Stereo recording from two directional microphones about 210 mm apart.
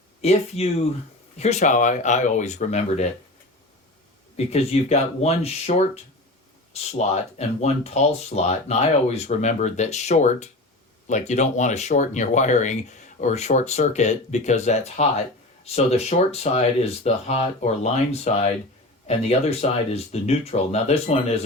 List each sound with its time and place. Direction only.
0.2 s speech: 30° left (ahead or behind)
4.4 s speech: 30° left (ahead or behind)